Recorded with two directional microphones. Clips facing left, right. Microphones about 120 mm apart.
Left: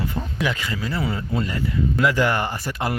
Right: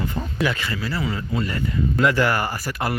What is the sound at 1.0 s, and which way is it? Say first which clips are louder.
Speech: left 1 dB; 30° left (ahead or behind).